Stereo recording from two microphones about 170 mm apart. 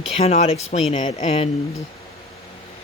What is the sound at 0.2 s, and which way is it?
Speech, 40° left (ahead or behind).